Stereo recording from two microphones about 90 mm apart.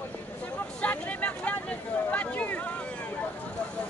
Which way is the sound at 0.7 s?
15° left (ahead or behind).